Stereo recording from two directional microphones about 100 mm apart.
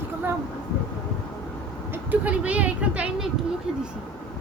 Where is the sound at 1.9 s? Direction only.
15° right (ahead or behind).